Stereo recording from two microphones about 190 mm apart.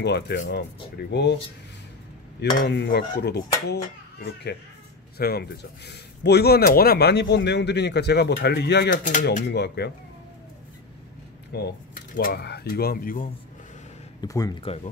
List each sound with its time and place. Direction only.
0.0 s speech: 60° left (ahead or behind)
2.6 s speech: 65° left (ahead or behind)
11.5 s speech: 55° left (ahead or behind)
14.2 s speech: 20° left (ahead or behind)